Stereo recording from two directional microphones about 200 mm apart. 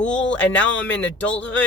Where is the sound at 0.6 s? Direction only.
65° left (ahead or behind).